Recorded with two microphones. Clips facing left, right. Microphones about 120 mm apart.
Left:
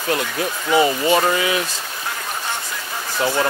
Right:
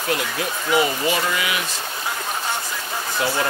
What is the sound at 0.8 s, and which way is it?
Speech, 25° left (ahead or behind).